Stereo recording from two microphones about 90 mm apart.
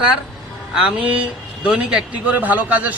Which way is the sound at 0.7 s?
10° right (ahead or behind).